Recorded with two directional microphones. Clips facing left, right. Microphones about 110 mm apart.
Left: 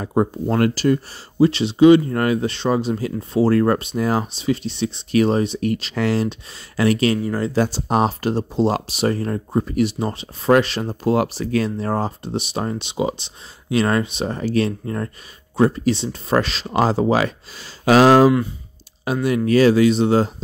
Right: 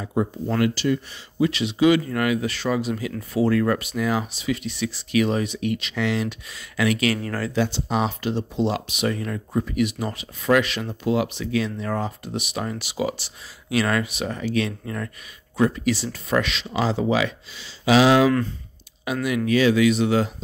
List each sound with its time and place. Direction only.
0.0 s speech: 45° left (ahead or behind)
7.2 s speech: 20° left (ahead or behind)
7.5 s speech: 40° left (ahead or behind)